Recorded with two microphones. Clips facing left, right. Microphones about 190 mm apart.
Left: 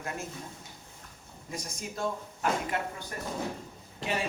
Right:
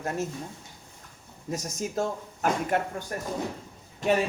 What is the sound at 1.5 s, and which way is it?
Speech, 45° right (ahead or behind).